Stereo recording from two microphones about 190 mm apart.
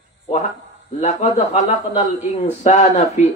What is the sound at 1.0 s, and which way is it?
Speech, 35° left (ahead or behind).